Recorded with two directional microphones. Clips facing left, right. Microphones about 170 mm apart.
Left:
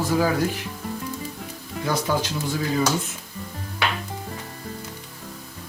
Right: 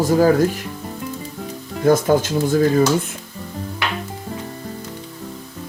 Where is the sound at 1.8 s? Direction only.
50° right (ahead or behind).